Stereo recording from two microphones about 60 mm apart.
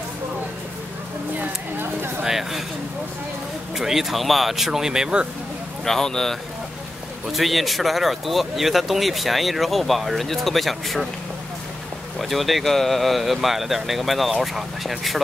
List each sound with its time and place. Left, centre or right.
1.4 s speech: right
2.2 s speech: centre
3.7 s speech: centre
5.9 s speech: centre
7.3 s speech: centre
12.2 s speech: centre